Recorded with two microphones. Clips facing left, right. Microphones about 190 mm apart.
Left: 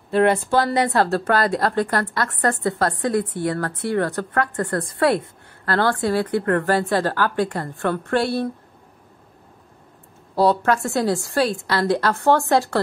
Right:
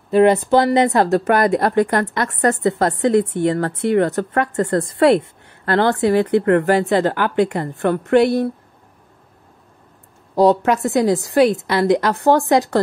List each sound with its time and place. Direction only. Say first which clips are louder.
0.1 s a woman's voice: right 5 dB; 20° right (ahead or behind)
10.3 s a woman's voice: right 4 dB; 15° right (ahead or behind)